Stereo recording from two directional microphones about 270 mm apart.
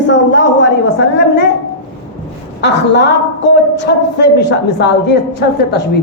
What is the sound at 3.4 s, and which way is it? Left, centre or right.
Speech, left.